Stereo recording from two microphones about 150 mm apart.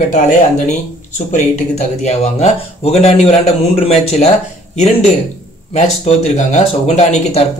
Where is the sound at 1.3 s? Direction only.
50° left (ahead or behind).